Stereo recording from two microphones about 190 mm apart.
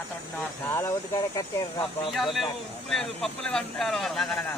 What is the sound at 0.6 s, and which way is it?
Speech, 15° left (ahead or behind).